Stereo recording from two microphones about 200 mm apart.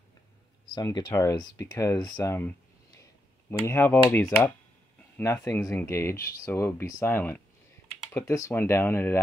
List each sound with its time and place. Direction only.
0.9 s speech: 20° left (ahead or behind)
3.0 s computer keyboard: 10° left (ahead or behind)
4.1 s speech: 15° left (ahead or behind)